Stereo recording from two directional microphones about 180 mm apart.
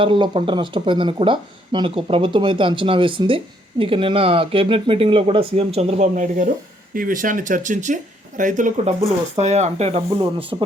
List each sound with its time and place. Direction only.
0.0 s speech: 30° right (ahead or behind)